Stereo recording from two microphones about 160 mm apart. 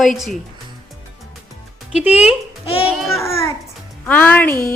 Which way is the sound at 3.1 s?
15° left (ahead or behind).